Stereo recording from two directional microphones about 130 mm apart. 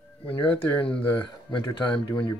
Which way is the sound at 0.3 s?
40° left (ahead or behind).